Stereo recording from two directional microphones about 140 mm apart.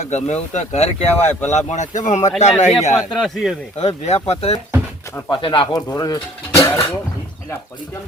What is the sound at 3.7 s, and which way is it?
Speech, 55° left (ahead or behind).